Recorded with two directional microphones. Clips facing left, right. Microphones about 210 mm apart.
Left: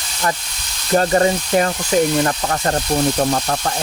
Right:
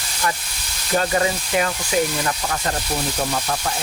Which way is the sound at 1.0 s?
40° left (ahead or behind).